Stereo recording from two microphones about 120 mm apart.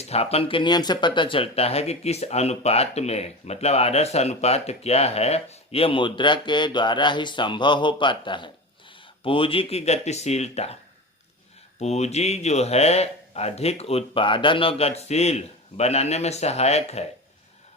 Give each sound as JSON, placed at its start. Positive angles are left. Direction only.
{"t": 0.0, "sound": "speech", "side_deg": 60}
{"t": 11.8, "sound": "speech", "side_deg": 65}